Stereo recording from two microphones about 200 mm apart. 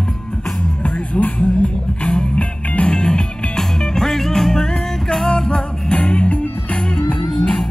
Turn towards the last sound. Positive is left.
turn(degrees=5)  # may be behind; listen again after turning